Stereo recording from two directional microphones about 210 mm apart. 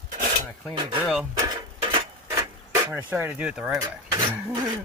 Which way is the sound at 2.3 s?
10° right (ahead or behind).